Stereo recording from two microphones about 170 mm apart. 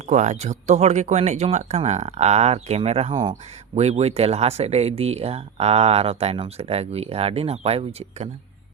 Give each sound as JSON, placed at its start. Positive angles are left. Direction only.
{"t": 0.1, "sound": "speech", "side_deg": -40}
{"t": 3.8, "sound": "speech", "side_deg": -40}